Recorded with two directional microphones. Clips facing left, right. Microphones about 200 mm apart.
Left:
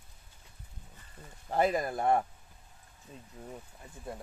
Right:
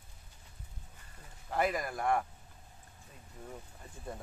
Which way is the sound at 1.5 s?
25° left (ahead or behind).